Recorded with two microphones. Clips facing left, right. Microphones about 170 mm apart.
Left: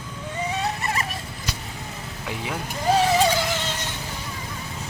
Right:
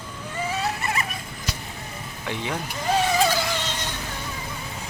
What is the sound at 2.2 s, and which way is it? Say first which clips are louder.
Speech: right 2 dB; 5° left (ahead or behind).